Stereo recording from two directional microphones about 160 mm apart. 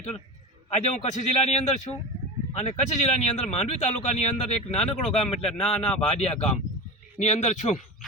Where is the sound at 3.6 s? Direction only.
40° left (ahead or behind).